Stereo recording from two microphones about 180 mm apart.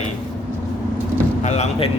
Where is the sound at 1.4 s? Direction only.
40° left (ahead or behind).